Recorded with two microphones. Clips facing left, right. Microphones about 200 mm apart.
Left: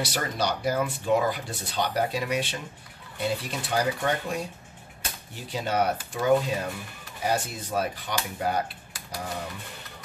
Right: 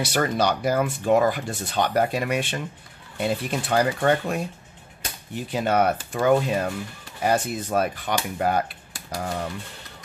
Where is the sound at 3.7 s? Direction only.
65° right (ahead or behind).